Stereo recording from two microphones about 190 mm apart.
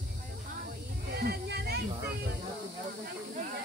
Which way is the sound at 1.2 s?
55° right (ahead or behind).